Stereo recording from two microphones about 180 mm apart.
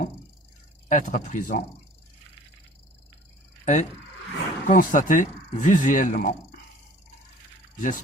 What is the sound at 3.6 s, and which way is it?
Speech, 40° left (ahead or behind).